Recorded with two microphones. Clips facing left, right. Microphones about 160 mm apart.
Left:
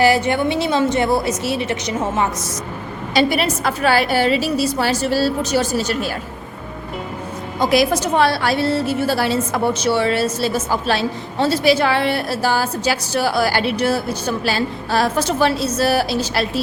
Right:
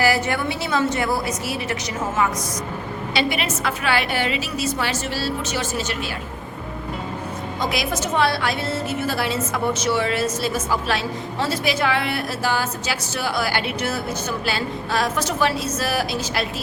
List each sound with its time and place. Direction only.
0.0 s a woman's voice: 25° left (ahead or behind)
3.2 s a woman's voice: 40° left (ahead or behind)
7.6 s a woman's voice: 35° left (ahead or behind)